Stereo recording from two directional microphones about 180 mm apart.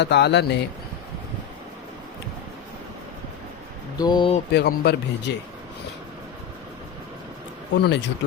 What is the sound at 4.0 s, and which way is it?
Speech, 25° left (ahead or behind).